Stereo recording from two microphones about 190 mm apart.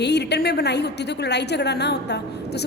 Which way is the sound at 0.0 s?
60° left (ahead or behind).